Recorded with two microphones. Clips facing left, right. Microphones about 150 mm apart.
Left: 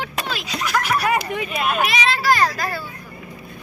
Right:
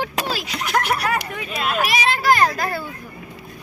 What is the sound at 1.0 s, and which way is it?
Speech, 15° left (ahead or behind).